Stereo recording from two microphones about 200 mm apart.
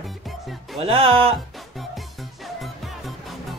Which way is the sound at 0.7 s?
30° right (ahead or behind).